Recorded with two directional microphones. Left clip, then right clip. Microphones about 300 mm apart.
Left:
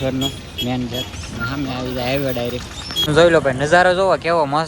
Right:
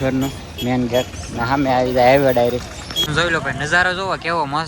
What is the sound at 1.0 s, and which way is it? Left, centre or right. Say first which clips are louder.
Speech: right 3 dB; centre.